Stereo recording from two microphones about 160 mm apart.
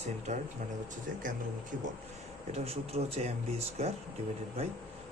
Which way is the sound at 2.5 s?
40° right (ahead or behind).